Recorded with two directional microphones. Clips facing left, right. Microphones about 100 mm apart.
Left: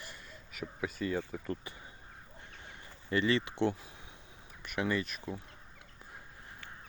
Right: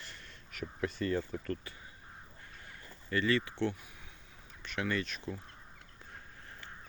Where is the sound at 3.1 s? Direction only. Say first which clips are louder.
Left 1 dB; 20° left (ahead or behind).